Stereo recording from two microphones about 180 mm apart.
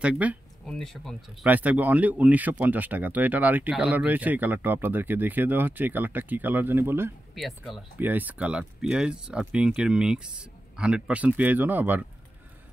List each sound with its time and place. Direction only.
0.0 s speech: 5° right (ahead or behind)
1.4 s speech: 10° right (ahead or behind)
7.3 s speech: centre (ahead or behind)